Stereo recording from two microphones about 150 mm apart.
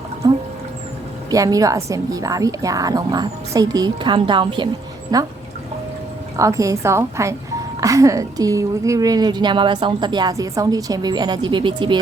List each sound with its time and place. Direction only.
1.3 s a woman's voice: 25° right (ahead or behind)
6.3 s a woman's voice: 20° right (ahead or behind)